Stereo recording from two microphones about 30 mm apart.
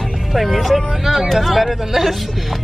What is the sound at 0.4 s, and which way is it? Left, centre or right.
Speech, centre.